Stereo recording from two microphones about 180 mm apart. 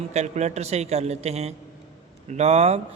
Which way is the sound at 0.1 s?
40° right (ahead or behind).